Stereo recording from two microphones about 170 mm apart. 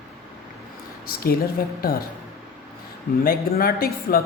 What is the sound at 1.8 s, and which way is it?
Speech, 60° left (ahead or behind).